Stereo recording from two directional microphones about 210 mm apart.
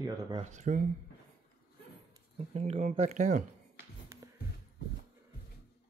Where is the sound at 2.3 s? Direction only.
30° right (ahead or behind).